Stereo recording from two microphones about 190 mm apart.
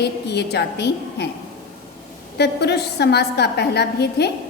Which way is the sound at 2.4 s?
60° left (ahead or behind).